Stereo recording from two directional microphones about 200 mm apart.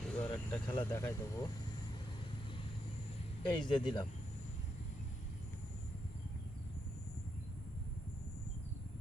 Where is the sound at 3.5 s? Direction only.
25° left (ahead or behind).